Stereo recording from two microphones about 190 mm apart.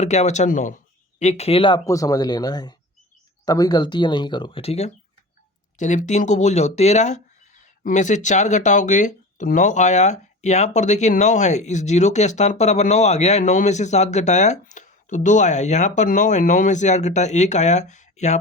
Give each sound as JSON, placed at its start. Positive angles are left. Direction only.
{"t": 0.0, "sound": "speech", "side_deg": 35}